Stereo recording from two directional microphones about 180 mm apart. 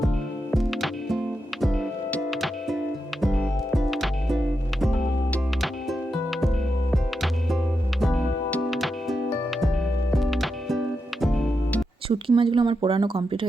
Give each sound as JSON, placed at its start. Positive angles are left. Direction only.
{"t": 0.5, "sound": "music", "side_deg": 0}
{"t": 8.0, "sound": "music", "side_deg": 5}
{"t": 12.3, "sound": "speech", "side_deg": -25}